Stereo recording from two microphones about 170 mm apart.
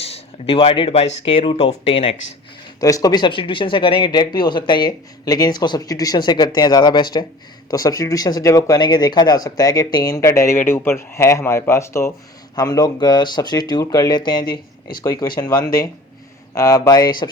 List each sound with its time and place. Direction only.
0.0 s speech: 35° left (ahead or behind)
2.8 s speech: 20° left (ahead or behind)